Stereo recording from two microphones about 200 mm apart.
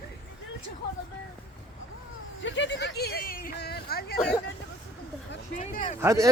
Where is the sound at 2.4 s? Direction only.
65° left (ahead or behind).